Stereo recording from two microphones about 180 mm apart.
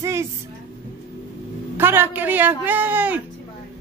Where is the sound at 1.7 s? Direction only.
10° right (ahead or behind).